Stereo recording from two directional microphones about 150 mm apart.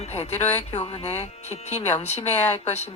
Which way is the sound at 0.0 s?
45° left (ahead or behind).